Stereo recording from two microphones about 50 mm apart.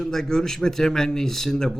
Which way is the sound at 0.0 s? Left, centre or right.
Centre.